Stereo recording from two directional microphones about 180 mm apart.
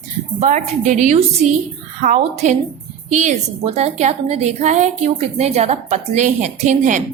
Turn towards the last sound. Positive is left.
turn(degrees=-45)  # may be behind; listen again after turning